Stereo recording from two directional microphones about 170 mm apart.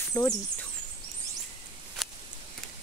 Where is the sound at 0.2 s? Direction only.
20° left (ahead or behind).